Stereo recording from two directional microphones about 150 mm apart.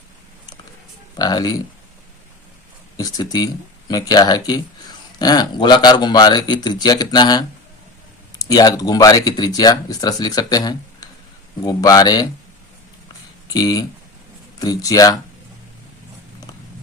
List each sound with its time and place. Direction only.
1.1 s speech: 25° left (ahead or behind)
3.0 s speech: 25° left (ahead or behind)
13.5 s speech: 25° left (ahead or behind)